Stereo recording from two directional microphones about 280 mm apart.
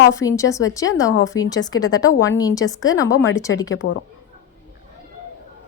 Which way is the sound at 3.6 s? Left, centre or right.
Left.